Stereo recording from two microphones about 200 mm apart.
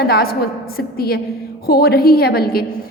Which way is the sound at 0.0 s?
50° left (ahead or behind).